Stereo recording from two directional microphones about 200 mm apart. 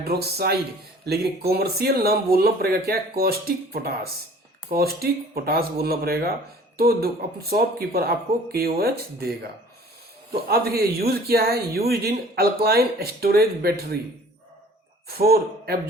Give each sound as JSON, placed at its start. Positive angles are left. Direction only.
{"t": 0.0, "sound": "a man's voice", "side_deg": -50}
{"t": 10.5, "sound": "a man's voice", "side_deg": -50}
{"t": 15.0, "sound": "speech", "side_deg": -50}